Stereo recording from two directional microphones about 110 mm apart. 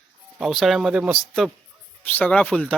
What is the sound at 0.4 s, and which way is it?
Speech, centre (ahead or behind).